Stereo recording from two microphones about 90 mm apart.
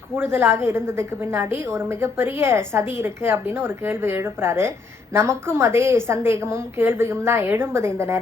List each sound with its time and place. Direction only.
0.2 s a woman's voice: 25° right (ahead or behind)